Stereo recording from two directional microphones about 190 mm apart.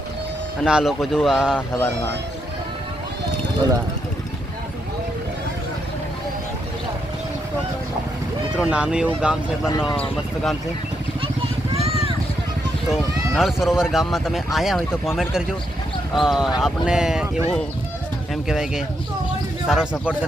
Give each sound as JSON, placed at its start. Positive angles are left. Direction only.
{"t": 0.6, "sound": "speech", "side_deg": -5}
{"t": 8.5, "sound": "speech", "side_deg": -5}
{"t": 9.6, "sound": "speech", "side_deg": 25}
{"t": 11.7, "sound": "vehicle", "side_deg": -30}
{"t": 12.9, "sound": "speech", "side_deg": 0}